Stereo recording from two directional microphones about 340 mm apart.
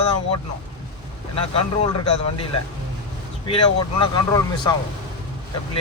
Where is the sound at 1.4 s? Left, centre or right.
Centre.